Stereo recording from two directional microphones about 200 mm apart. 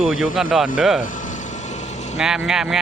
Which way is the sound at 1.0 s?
40° left (ahead or behind).